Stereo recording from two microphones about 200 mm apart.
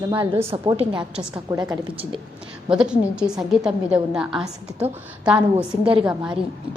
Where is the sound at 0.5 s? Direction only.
25° right (ahead or behind).